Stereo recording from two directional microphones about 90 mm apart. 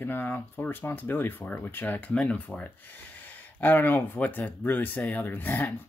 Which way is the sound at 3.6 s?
20° left (ahead or behind).